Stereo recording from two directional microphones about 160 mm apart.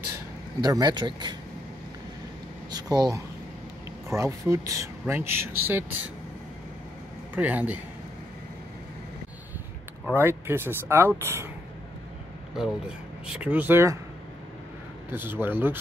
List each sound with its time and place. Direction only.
0.7 s speech: 25° right (ahead or behind)
2.7 s speech: 25° right (ahead or behind)
7.3 s speech: 10° right (ahead or behind)
10.0 s speech: 15° right (ahead or behind)
12.5 s speech: 5° right (ahead or behind)
15.0 s speech: 15° right (ahead or behind)